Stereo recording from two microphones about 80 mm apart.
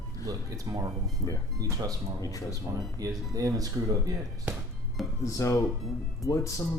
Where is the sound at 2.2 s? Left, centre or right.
Left.